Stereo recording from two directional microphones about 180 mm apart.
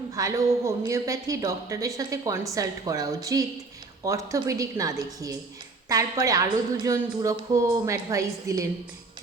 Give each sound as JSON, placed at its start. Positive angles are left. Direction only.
{"t": 0.2, "sound": "a woman's voice", "side_deg": -15}